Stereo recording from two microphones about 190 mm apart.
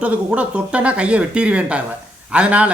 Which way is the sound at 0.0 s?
5° right (ahead or behind).